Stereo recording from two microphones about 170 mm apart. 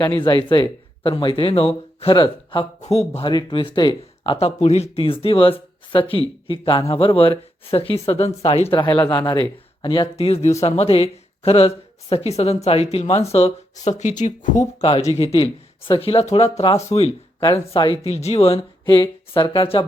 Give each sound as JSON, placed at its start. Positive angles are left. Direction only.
{"t": 0.0, "sound": "speech", "side_deg": 30}
{"t": 14.8, "sound": "speech", "side_deg": 35}